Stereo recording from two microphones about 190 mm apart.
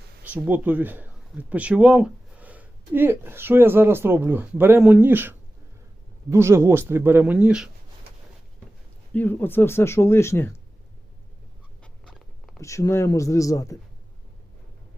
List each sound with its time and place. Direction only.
0.3 s speech: 10° right (ahead or behind)
6.3 s speech: 15° right (ahead or behind)
9.1 s speech: 10° left (ahead or behind)
11.8 s duck: 5° left (ahead or behind)
12.5 s speech: 15° left (ahead or behind)